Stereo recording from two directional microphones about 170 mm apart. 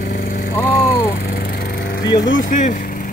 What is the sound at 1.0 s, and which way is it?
Lawn mower, 60° left (ahead or behind).